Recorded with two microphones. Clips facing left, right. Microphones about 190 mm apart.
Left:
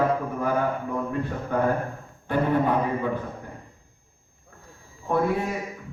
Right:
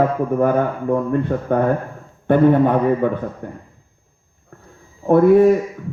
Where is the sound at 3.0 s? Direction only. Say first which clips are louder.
Right 8 dB; 60° right (ahead or behind).